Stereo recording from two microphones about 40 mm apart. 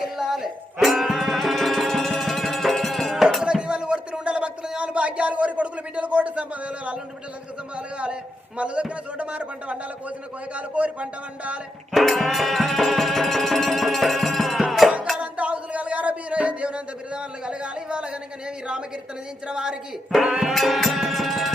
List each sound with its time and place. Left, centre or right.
0.2 s music: centre
3.4 s music: right
4.8 s a sound: right
7.8 s a man's voice: right
12.0 s music: centre
15.2 s a sound: right
19.5 s a woman's voice: right
20.5 s music: centre